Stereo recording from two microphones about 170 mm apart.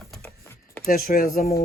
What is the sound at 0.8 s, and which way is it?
Speech, 55° left (ahead or behind).